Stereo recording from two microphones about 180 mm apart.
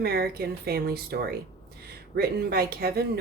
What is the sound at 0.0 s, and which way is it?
Speech, 60° right (ahead or behind).